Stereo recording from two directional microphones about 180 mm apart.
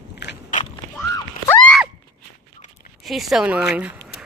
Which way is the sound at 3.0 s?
Centre (ahead or behind).